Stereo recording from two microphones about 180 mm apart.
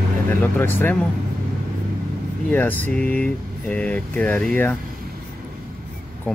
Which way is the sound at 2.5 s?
10° left (ahead or behind).